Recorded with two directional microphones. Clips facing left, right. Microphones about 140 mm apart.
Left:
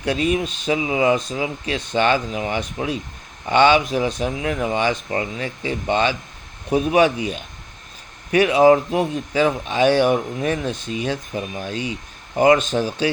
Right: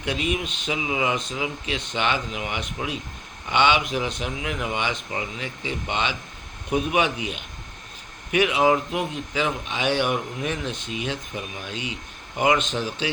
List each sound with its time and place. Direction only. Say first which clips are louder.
0.0 s speech: left 6 dB; 40° left (ahead or behind)